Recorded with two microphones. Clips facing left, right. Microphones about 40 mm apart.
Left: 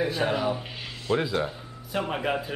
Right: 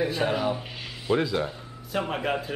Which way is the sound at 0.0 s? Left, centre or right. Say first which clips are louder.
Even; centre.